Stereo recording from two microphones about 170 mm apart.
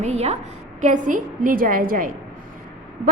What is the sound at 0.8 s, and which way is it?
A woman's voice, 50° right (ahead or behind).